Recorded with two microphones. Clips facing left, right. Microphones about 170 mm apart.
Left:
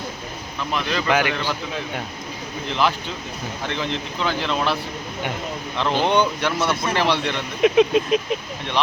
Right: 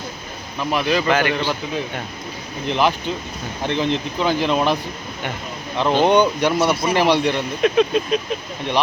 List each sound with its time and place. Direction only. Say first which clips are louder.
0.7 s a man's voice: right 5 dB; 10° right (ahead or behind)
1.0 s speech: right 2 dB; 10° left (ahead or behind)
2.6 s a man's voice: right 3 dB; 15° right (ahead or behind)
7.6 s speech: left 2 dB; 15° left (ahead or behind)